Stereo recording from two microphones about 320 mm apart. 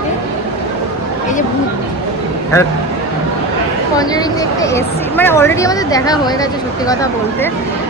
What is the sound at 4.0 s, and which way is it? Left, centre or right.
Speech, centre.